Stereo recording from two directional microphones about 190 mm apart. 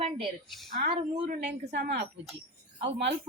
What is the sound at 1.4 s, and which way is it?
Speech, 60° right (ahead or behind).